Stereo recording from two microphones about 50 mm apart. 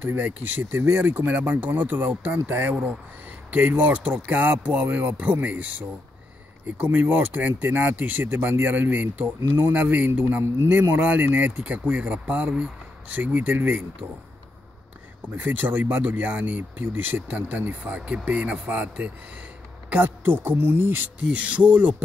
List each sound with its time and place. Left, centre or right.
0.0 s speech: right
8.3 s speech: right
15.2 s speech: right
20.0 s speech: right
21.3 s speech: right